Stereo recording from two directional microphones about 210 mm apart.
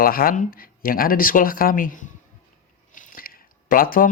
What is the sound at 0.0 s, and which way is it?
Speech, 45° left (ahead or behind).